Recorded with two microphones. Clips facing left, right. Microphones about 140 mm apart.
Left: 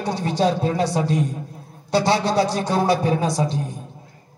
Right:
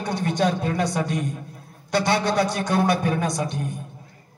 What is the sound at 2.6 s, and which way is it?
Speech, 30° left (ahead or behind).